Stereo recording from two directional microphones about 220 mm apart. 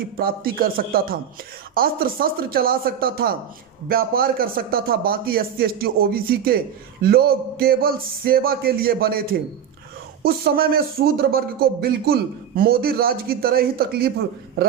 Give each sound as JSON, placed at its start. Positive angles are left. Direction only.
{"t": 0.2, "sound": "a man's voice", "side_deg": -40}